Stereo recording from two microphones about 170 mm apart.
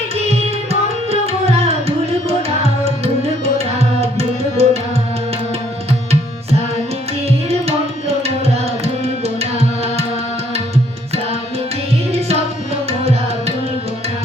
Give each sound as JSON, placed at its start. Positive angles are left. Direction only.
{"t": 0.3, "sound": "tabla", "side_deg": -40}
{"t": 4.0, "sound": "tabla", "side_deg": -35}
{"t": 8.8, "sound": "tabla", "side_deg": -40}